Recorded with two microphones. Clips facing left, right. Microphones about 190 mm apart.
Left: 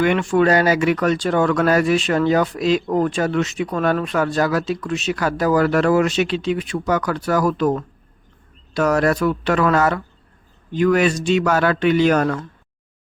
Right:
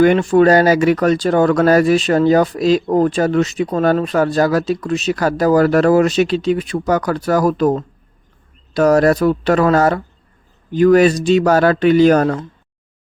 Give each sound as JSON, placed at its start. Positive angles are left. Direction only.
{"t": 0.0, "sound": "speech", "side_deg": -40}